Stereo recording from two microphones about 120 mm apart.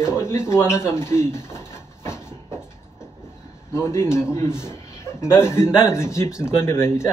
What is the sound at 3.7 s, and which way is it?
Speech, 25° left (ahead or behind).